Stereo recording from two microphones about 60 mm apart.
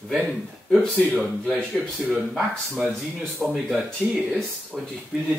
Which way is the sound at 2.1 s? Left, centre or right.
Centre.